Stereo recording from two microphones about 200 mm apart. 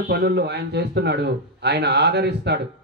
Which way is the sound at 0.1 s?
55° right (ahead or behind).